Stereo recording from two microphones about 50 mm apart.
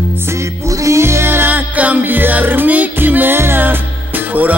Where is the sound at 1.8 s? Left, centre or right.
Right.